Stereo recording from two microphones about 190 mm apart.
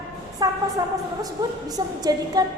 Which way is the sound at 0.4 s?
20° right (ahead or behind).